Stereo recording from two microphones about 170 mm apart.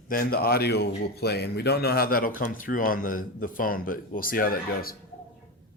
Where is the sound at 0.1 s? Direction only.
60° left (ahead or behind).